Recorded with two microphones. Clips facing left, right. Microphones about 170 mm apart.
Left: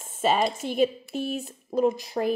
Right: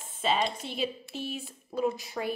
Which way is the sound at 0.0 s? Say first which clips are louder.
Left 5 dB; 45° left (ahead or behind).